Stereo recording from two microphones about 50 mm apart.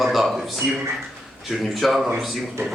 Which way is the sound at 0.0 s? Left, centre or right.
Centre.